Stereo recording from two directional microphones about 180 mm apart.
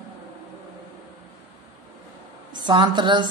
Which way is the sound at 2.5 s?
25° right (ahead or behind).